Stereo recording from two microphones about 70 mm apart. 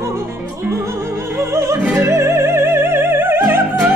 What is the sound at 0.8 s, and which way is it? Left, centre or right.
Music, right.